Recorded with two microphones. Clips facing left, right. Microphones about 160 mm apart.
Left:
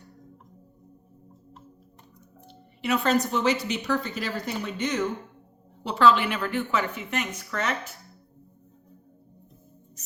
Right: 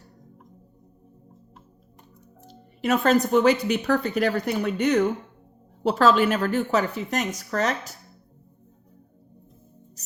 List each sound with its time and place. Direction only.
2.5 s speech: 45° right (ahead or behind)
5.8 s a woman's voice: 45° right (ahead or behind)